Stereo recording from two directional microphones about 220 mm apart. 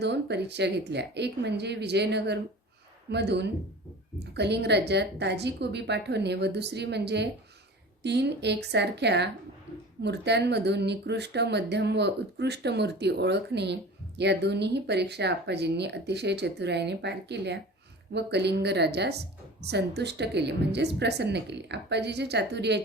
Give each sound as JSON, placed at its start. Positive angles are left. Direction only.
{"t": 0.0, "sound": "speech", "side_deg": -50}